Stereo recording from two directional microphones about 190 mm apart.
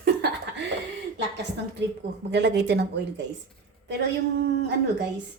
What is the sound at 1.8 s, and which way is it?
A woman's voice, 65° right (ahead or behind).